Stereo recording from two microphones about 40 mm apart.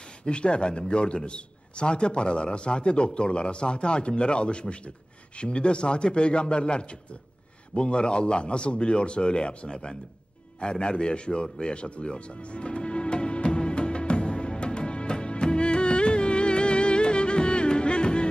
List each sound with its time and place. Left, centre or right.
0.2 s a man's voice: left
11.6 s music: left